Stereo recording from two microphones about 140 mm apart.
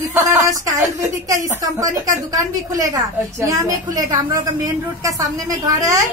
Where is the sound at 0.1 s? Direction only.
20° right (ahead or behind).